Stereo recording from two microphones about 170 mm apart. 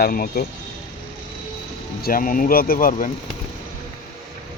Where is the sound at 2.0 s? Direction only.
55° left (ahead or behind).